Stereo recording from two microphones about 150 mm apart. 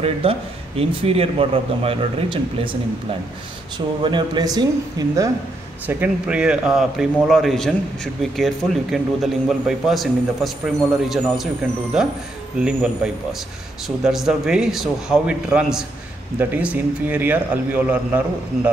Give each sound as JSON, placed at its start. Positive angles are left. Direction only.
{"t": 0.0, "sound": "speech", "side_deg": -40}
{"t": 5.9, "sound": "a man's voice", "side_deg": -10}
{"t": 11.9, "sound": "a man's voice", "side_deg": -5}